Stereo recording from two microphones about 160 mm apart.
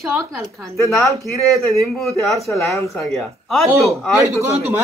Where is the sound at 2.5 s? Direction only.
20° left (ahead or behind).